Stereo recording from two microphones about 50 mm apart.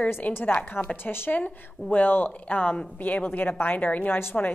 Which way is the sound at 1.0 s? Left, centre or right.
Left.